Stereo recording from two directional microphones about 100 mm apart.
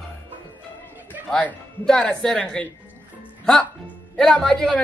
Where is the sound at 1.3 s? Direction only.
10° left (ahead or behind).